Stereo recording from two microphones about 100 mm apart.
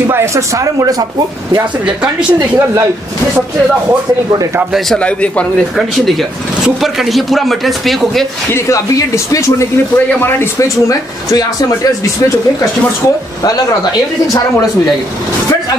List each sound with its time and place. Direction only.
0.0 s speech: 25° right (ahead or behind)
4.7 s a man's voice: 5° left (ahead or behind)
6.6 s speech: 5° right (ahead or behind)
8.5 s speech: 30° left (ahead or behind)
10.9 s speech: 35° left (ahead or behind)